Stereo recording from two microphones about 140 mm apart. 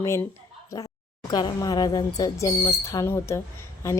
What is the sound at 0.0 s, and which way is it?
A woman's voice, 20° left (ahead or behind).